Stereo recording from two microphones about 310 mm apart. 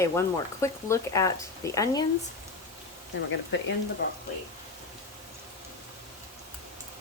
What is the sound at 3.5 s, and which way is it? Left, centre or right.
Speech, left.